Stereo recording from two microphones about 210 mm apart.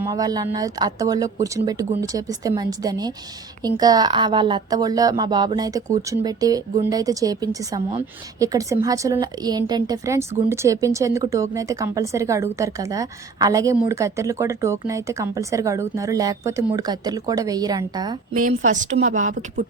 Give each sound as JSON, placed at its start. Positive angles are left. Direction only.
{"t": 0.0, "sound": "a woman's voice", "side_deg": -15}
{"t": 18.3, "sound": "speech", "side_deg": -35}